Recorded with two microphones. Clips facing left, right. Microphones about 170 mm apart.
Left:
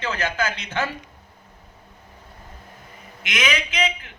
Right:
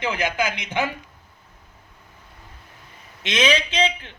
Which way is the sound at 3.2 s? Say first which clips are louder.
Right 5 dB; 30° right (ahead or behind).